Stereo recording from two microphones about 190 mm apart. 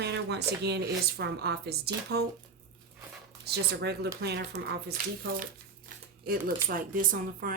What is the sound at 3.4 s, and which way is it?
Speech, 60° right (ahead or behind).